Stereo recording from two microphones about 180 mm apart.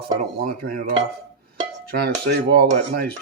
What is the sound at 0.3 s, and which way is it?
Speech, 55° right (ahead or behind).